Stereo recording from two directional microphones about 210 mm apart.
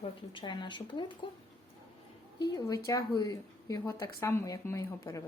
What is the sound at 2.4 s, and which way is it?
A woman's voice, 20° left (ahead or behind).